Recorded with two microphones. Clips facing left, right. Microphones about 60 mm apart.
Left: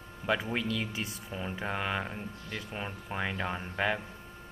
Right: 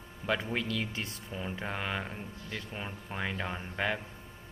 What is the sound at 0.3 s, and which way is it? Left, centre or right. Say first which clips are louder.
Speech: left 1 dB; centre.